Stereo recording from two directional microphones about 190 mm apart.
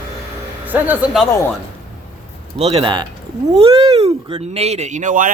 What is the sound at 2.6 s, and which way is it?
Speech, 30° right (ahead or behind).